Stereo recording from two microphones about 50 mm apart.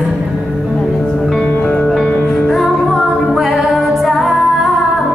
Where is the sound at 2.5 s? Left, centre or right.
Centre.